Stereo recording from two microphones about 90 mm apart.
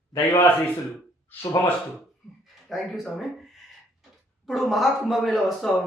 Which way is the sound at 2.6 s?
Centre (ahead or behind).